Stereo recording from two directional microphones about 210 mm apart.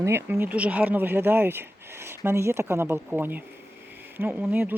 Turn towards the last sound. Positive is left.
turn(degrees=-10)  # may be behind; listen again after turning